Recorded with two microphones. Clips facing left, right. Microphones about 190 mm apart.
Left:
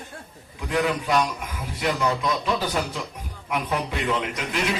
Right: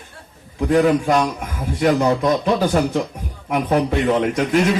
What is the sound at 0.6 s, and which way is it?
A man's voice, 45° right (ahead or behind).